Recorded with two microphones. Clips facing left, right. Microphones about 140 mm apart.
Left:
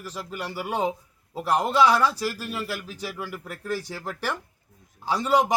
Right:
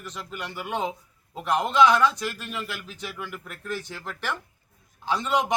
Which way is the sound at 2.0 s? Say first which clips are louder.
Even; 35° left (ahead or behind).